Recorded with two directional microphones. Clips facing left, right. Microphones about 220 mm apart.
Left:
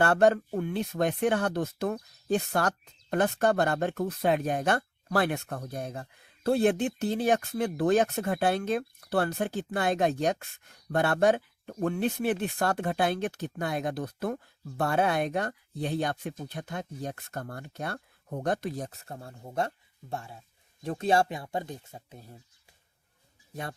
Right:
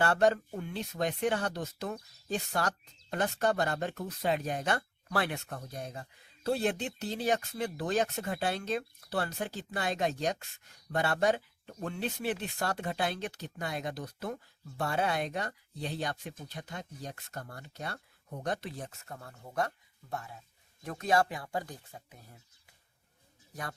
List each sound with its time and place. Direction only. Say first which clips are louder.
0.0 s speech: left 4 dB; 55° left (ahead or behind); by 22.4 s 30° left (ahead or behind)